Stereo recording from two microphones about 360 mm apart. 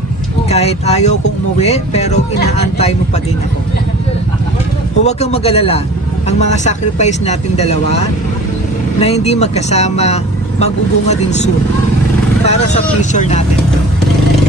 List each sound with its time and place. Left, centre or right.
0.5 s speech: centre
5.0 s speech: centre
9.0 s speech: centre